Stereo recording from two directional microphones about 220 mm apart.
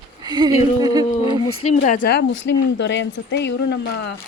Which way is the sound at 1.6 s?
35° left (ahead or behind).